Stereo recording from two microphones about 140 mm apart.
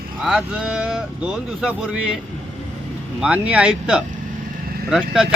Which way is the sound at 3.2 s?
10° right (ahead or behind).